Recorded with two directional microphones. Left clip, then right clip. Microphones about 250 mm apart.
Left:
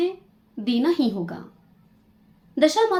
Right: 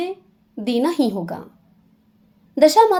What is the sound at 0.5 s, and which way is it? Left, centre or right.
Speech, right.